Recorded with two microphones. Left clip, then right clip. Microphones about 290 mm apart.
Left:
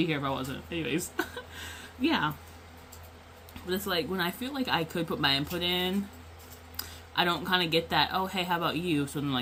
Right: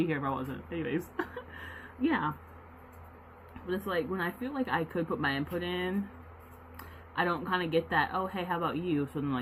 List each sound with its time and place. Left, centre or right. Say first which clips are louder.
0.0 s speech: left 2 dB; left
3.7 s speech: left 2 dB; left